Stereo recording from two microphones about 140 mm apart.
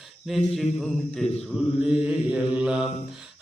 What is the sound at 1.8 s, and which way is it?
Mantra, 5° right (ahead or behind).